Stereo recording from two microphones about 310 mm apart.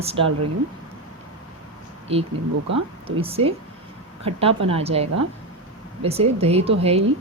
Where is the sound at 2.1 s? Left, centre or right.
Centre.